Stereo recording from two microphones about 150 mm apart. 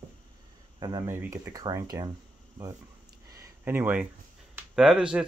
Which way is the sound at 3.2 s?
20° right (ahead or behind).